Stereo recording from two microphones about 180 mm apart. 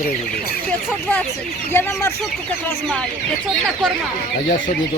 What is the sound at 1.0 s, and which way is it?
Speech, 5° left (ahead or behind).